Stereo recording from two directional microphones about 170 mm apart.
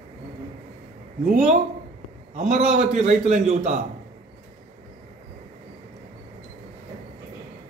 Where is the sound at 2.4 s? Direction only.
40° right (ahead or behind).